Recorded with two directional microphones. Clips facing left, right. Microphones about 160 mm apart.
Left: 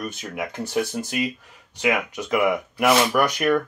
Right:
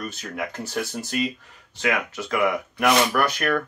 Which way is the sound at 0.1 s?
15° left (ahead or behind).